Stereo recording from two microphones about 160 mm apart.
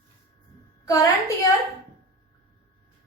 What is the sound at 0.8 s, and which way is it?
Speech, 20° left (ahead or behind).